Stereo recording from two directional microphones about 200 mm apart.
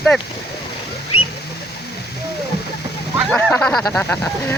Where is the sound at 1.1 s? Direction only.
90° left.